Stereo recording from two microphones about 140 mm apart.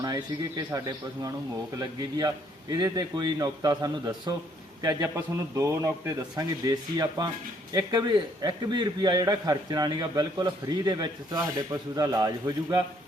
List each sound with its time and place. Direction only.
0.0 s a man's voice: 30° right (ahead or behind)